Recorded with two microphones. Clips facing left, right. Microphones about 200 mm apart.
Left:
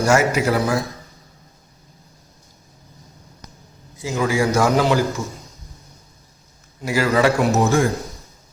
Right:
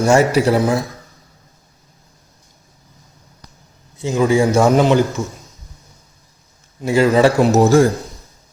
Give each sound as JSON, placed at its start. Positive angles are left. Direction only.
{"t": 0.0, "sound": "a man's voice", "side_deg": -30}
{"t": 3.9, "sound": "a man's voice", "side_deg": -25}
{"t": 6.8, "sound": "a man's voice", "side_deg": -25}